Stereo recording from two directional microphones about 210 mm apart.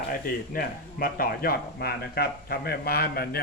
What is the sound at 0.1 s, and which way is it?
A man's voice, 45° left (ahead or behind).